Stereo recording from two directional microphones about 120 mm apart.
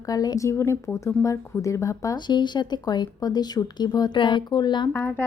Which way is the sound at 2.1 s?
40° left (ahead or behind).